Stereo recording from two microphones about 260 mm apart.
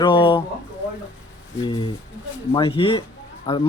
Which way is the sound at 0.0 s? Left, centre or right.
Centre.